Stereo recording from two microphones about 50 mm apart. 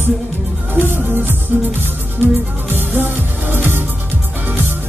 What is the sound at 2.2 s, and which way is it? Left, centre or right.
Music, right.